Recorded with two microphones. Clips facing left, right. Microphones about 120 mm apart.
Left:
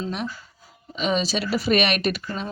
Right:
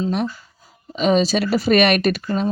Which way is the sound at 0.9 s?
40° right (ahead or behind).